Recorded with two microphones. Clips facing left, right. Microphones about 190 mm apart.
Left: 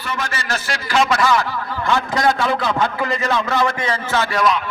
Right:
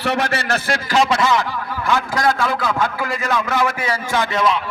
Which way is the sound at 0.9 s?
35° right (ahead or behind).